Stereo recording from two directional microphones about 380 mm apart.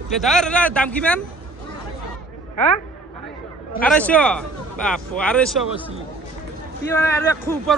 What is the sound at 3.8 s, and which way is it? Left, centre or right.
Speech, centre.